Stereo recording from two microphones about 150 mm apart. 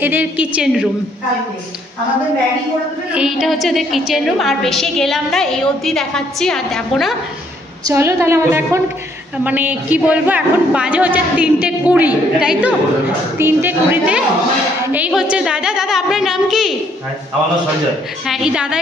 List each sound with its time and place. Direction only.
0.0 s a man's voice: 10° right (ahead or behind)
3.1 s a woman's voice: 5° right (ahead or behind)
7.8 s a man's voice: 15° right (ahead or behind)
18.2 s a woman's voice: 5° right (ahead or behind)